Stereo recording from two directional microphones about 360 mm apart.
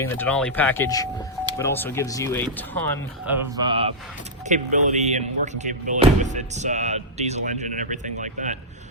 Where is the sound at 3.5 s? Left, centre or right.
Centre.